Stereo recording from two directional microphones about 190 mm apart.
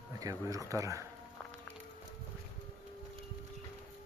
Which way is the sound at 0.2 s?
20° right (ahead or behind).